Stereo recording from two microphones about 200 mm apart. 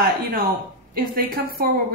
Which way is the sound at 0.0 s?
50° right (ahead or behind).